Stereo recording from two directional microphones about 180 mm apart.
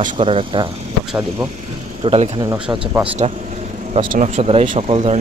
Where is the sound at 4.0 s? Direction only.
45° right (ahead or behind).